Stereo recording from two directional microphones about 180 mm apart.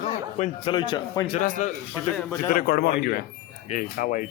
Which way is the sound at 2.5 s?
55° left (ahead or behind).